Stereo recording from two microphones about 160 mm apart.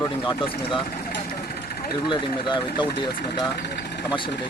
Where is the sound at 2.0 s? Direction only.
30° left (ahead or behind).